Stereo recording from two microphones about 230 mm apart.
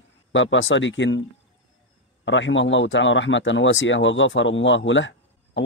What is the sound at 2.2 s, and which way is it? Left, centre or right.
Speech, left.